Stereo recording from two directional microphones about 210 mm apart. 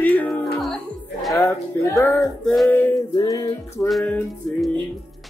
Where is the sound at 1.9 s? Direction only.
5° left (ahead or behind).